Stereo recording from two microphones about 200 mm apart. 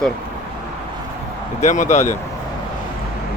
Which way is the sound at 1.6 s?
35° left (ahead or behind).